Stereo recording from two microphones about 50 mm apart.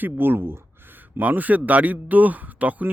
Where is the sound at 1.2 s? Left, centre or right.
Right.